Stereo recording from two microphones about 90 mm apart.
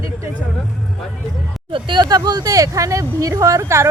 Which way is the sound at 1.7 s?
60° right (ahead or behind).